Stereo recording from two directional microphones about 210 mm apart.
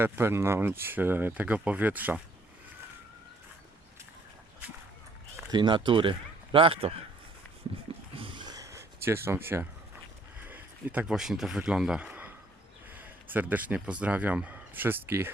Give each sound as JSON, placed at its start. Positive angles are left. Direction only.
{"t": 0.0, "sound": "speech", "side_deg": -10}
{"t": 5.5, "sound": "speech", "side_deg": -20}
{"t": 8.1, "sound": "a sound", "side_deg": -25}
{"t": 10.5, "sound": "speech", "side_deg": -5}